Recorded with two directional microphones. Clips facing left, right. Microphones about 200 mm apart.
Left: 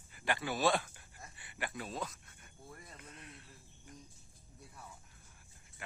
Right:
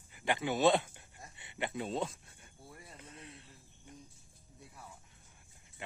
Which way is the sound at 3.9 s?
25° right (ahead or behind).